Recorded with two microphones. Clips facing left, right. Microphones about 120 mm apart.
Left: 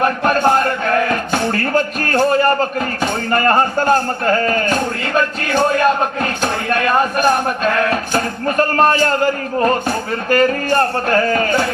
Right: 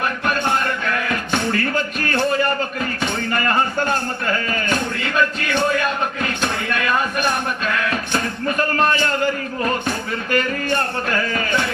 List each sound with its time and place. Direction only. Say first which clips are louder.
0.0 s music: left 7 dB; 40° left (ahead or behind)